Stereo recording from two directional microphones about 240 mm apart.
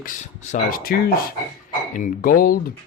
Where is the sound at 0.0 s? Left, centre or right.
Left.